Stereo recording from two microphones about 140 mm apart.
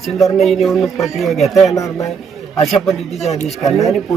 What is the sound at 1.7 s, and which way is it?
Speech, 20° left (ahead or behind).